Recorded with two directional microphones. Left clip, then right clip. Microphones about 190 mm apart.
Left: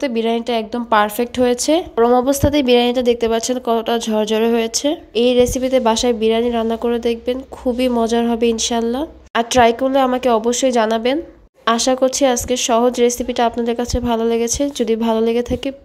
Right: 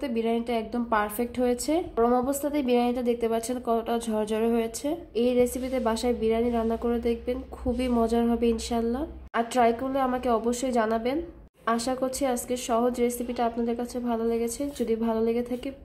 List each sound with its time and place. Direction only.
0.0 s a woman's voice: 20° left (ahead or behind)